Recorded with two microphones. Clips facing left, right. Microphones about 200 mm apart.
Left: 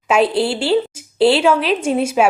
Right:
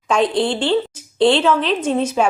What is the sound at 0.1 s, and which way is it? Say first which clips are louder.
A woman's voice: left 2 dB; 5° left (ahead or behind).